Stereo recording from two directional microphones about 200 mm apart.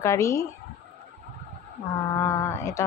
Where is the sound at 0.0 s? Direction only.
15° left (ahead or behind).